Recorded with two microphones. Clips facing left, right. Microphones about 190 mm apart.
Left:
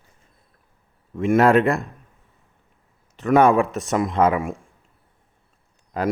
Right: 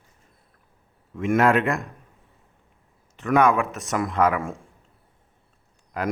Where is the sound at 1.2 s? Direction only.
35° left (ahead or behind).